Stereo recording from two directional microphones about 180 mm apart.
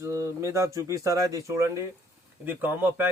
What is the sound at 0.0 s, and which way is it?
Speech, 15° right (ahead or behind).